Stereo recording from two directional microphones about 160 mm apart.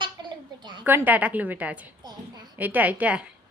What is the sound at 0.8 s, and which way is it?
A woman's voice, 10° right (ahead or behind).